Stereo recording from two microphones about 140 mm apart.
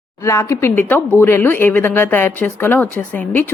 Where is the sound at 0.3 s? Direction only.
20° left (ahead or behind).